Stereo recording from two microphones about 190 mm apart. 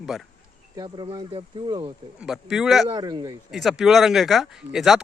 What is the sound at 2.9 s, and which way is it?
Speech, 20° right (ahead or behind).